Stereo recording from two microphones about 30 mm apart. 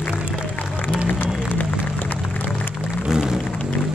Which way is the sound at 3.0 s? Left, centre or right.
Centre.